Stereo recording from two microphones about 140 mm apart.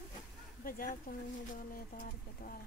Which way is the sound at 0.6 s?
90° left.